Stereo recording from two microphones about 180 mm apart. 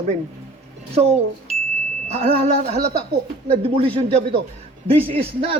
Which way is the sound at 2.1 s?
35° right (ahead or behind).